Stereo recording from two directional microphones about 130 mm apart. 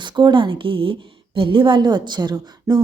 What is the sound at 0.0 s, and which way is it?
A woman's voice, 35° right (ahead or behind).